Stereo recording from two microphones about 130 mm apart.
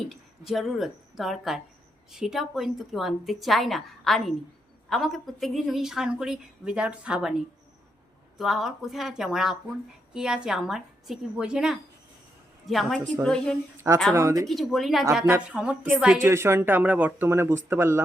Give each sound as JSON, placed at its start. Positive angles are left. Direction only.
{"t": 0.1, "sound": "a woman's voice", "side_deg": 0}
{"t": 8.4, "sound": "a woman's voice", "side_deg": 0}
{"t": 13.7, "sound": "speech", "side_deg": -20}
{"t": 14.4, "sound": "a woman's voice", "side_deg": 0}
{"t": 16.2, "sound": "speech", "side_deg": -20}